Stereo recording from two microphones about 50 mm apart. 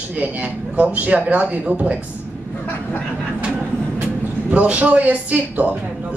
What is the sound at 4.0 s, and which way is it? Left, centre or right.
Speech, right.